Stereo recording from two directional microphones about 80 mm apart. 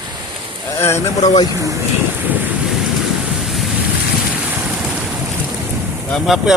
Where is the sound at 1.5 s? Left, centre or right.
Right.